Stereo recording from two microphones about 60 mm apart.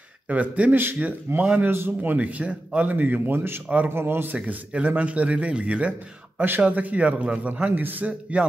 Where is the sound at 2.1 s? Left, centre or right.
Right.